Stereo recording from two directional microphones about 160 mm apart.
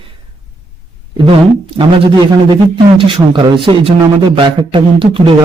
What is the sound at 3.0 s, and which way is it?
A man's voice, 30° right (ahead or behind).